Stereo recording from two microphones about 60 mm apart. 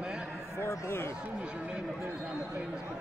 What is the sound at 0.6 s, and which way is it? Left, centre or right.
Speech, left.